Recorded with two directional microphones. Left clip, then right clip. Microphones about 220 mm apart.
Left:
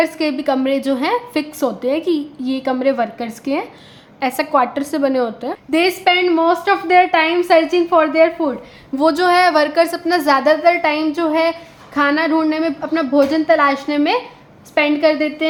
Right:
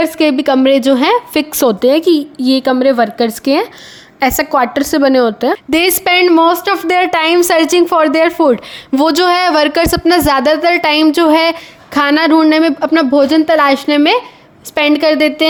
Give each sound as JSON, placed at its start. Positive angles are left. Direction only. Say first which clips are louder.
{"t": 0.0, "sound": "a woman's voice", "louder": "right 5 dB", "side_deg": -35}
{"t": 5.7, "sound": "a woman's voice", "louder": "right 2 dB", "side_deg": -50}
{"t": 9.0, "sound": "a woman's voice", "louder": "right 2 dB", "side_deg": -40}